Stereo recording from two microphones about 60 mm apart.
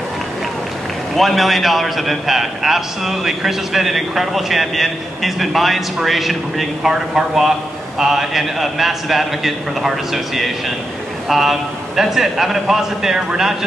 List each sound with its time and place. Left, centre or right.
1.1 s a man's voice: centre